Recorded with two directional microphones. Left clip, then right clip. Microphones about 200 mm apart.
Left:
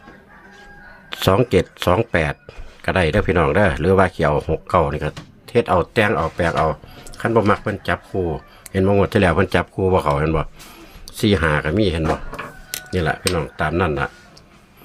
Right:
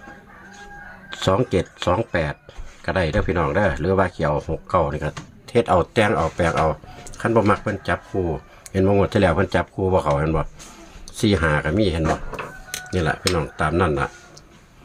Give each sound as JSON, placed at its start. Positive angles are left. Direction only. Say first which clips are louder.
{"t": 1.1, "sound": "speech", "louder": "left 4 dB", "side_deg": 20}
{"t": 5.5, "sound": "speech", "louder": "left 1 dB", "side_deg": 5}